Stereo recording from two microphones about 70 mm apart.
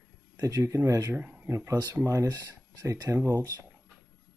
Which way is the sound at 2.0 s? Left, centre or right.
Right.